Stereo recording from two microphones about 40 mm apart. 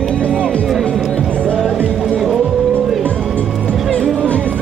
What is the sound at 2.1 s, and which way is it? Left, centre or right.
Music, centre.